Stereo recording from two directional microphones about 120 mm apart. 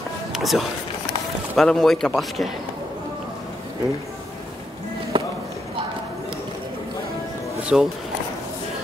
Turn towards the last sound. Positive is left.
turn(degrees=-5)  # may be behind; listen again after turning